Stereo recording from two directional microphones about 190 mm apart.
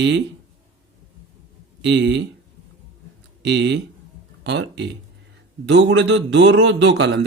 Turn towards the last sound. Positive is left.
turn(degrees=-65)  # may be behind; listen again after turning